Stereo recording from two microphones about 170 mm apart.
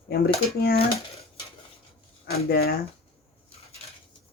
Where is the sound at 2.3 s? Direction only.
65° left (ahead or behind).